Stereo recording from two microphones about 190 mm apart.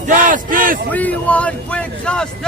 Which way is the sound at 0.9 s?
10° left (ahead or behind).